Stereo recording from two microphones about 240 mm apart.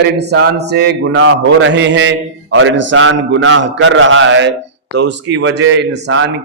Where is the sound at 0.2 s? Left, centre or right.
Right.